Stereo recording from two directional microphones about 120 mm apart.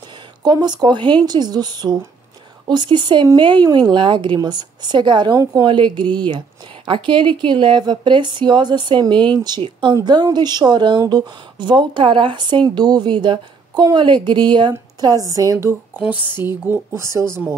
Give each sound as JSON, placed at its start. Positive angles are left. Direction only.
{"t": 0.4, "sound": "speech", "side_deg": -35}
{"t": 16.0, "sound": "speech", "side_deg": -15}